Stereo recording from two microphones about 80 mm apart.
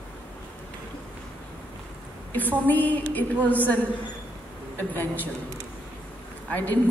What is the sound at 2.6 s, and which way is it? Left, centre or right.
A woman's voice, left.